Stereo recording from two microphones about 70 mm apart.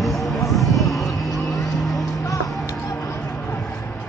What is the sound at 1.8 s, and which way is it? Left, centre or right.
Music, centre.